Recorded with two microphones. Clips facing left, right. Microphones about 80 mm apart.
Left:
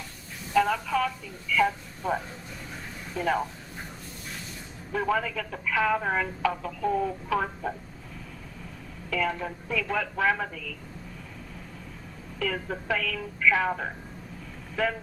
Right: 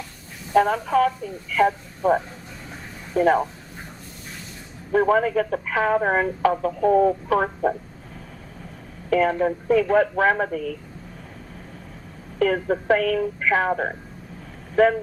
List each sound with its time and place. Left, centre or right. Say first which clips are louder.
0.5 s speech: right 6 dB; right
4.9 s speech: right 9 dB; right
9.0 s speech: right 10 dB; right
12.4 s speech: right 10 dB; right